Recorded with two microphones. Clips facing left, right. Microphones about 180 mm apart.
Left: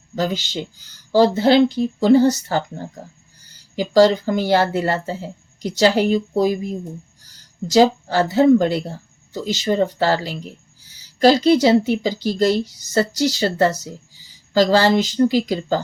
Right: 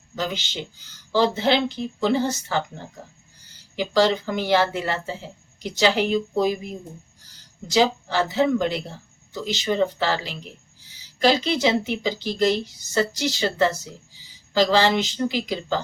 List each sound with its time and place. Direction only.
0.2 s speech: 40° left (ahead or behind)
7.7 s speech: 45° left (ahead or behind)